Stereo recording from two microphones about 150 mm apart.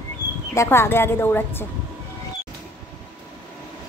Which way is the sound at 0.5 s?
15° left (ahead or behind).